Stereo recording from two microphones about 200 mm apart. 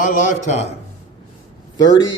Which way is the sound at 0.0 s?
40° left (ahead or behind).